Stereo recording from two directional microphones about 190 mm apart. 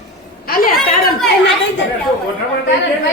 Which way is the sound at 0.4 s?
50° left (ahead or behind).